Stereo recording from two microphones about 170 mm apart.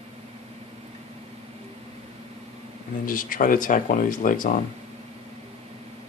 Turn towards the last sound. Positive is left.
turn(degrees=50)  # may be behind; listen again after turning